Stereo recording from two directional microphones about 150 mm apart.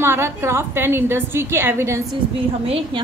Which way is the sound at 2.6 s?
40° right (ahead or behind).